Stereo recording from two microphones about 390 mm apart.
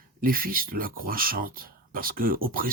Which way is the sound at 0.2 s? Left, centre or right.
Right.